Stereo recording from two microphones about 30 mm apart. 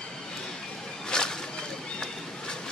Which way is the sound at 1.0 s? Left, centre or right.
Left.